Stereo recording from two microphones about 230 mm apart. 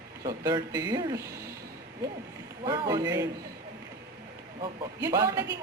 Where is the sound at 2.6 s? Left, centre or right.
Centre.